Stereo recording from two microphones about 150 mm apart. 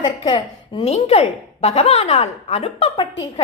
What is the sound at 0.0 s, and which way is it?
A woman's voice, 30° left (ahead or behind).